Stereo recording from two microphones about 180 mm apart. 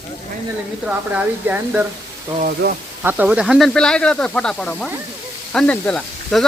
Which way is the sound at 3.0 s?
10° right (ahead or behind).